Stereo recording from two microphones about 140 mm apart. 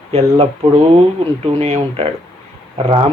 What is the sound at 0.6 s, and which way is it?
Speech, 40° right (ahead or behind).